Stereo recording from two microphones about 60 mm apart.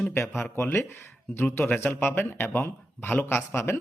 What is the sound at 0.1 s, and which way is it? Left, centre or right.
Speech, left.